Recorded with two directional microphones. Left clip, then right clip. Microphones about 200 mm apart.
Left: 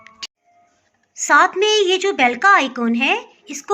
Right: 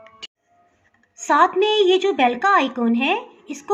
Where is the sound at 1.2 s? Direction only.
5° right (ahead or behind).